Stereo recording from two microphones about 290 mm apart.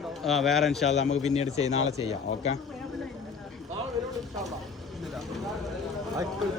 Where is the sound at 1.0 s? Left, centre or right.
Left.